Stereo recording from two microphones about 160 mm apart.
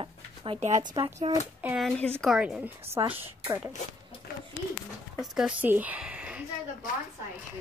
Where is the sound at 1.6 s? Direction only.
10° right (ahead or behind).